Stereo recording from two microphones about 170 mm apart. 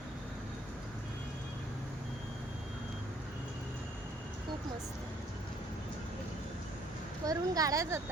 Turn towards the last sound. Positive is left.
turn(degrees=-20)  # may be behind; listen again after turning